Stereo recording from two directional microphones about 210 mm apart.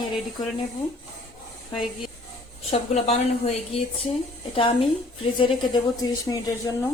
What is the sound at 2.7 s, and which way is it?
A woman's voice, 30° left (ahead or behind).